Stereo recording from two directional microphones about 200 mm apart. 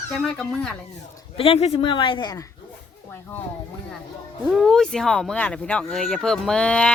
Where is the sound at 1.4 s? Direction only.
30° left (ahead or behind); by 3.5 s 10° left (ahead or behind).